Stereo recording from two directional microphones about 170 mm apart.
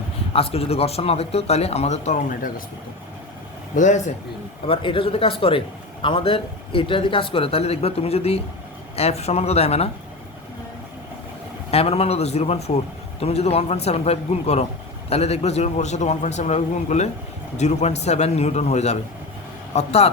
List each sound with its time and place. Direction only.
0.3 s speech: 35° left (ahead or behind)
3.8 s speech: 45° left (ahead or behind)
4.6 s speech: 30° left (ahead or behind)
11.7 s speech: 35° left (ahead or behind)